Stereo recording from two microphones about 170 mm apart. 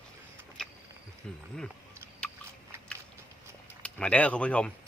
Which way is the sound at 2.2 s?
5° left (ahead or behind).